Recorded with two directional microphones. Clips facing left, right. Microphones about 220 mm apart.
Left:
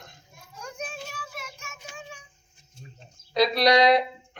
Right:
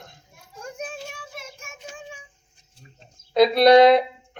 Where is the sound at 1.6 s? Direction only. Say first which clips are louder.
Right 4 dB; 50° right (ahead or behind).